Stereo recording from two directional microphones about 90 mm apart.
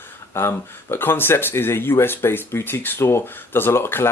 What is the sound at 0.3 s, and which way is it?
Speech, 25° left (ahead or behind).